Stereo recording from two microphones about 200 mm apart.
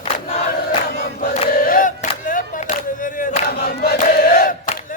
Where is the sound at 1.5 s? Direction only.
45° left (ahead or behind).